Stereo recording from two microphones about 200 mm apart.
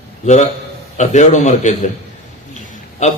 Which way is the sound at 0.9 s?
35° left (ahead or behind).